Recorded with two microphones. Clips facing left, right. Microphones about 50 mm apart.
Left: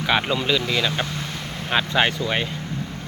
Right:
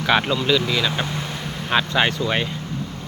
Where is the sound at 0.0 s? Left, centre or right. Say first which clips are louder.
Right 2 dB; centre.